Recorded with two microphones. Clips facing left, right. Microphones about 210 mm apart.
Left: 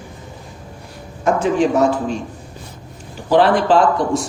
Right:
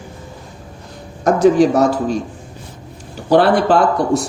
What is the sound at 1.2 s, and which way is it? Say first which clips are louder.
Speech: right 5 dB; 40° right (ahead or behind).